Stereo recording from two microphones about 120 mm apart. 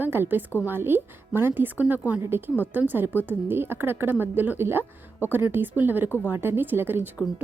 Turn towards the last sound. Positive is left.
turn(degrees=-15)  # may be behind; listen again after turning